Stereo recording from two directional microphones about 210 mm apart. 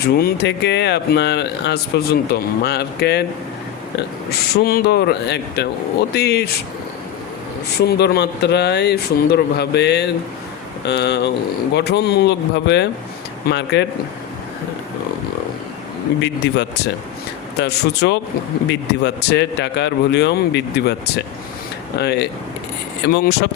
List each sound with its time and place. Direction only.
0.0 s a man's voice: 45° left (ahead or behind)
4.3 s a man's voice: 45° left (ahead or behind)
7.8 s a man's voice: 50° left (ahead or behind)
16.2 s a man's voice: 55° left (ahead or behind)